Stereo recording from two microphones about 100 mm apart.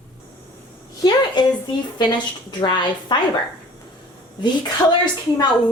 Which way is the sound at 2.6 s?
50° left (ahead or behind).